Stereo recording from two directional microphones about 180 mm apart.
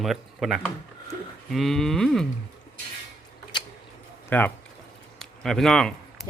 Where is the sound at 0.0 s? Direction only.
Centre (ahead or behind).